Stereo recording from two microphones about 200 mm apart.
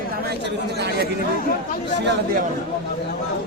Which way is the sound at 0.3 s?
55° right (ahead or behind).